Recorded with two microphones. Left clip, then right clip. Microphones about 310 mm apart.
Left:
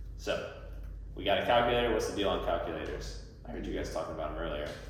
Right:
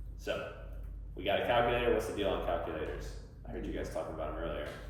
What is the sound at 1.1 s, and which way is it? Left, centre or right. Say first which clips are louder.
A man's voice: left 3 dB; centre.